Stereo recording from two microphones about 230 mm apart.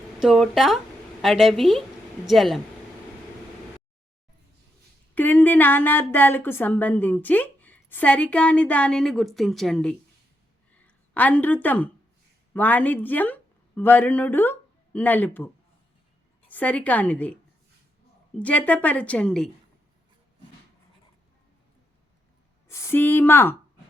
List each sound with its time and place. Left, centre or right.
0.2 s a woman's voice: centre
5.1 s a woman's voice: centre
16.5 s a woman's voice: centre
18.3 s a woman's voice: centre
22.7 s a woman's voice: centre